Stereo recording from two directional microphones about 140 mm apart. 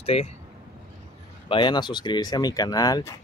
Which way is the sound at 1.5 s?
35° left (ahead or behind).